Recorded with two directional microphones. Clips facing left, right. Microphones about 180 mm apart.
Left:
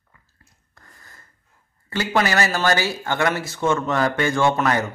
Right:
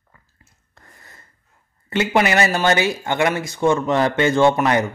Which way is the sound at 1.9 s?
20° right (ahead or behind).